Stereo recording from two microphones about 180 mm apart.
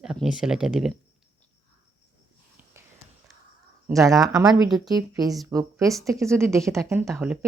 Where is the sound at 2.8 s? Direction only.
15° right (ahead or behind).